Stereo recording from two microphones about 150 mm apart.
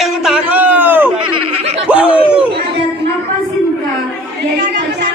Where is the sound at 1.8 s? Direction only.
10° right (ahead or behind).